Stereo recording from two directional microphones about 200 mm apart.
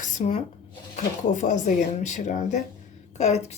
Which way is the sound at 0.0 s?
40° left (ahead or behind).